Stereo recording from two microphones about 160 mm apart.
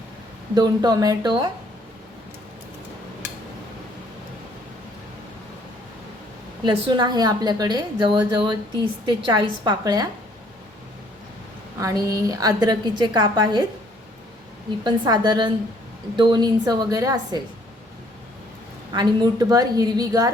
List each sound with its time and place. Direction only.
0.5 s a woman's voice: 25° right (ahead or behind)
6.7 s a woman's voice: 30° right (ahead or behind)
11.8 s a woman's voice: 20° right (ahead or behind)
14.8 s a woman's voice: 25° right (ahead or behind)
18.9 s a woman's voice: 25° right (ahead or behind)